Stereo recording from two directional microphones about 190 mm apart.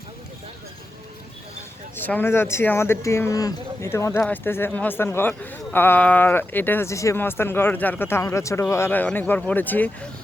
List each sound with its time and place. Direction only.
2.0 s speech: 10° left (ahead or behind)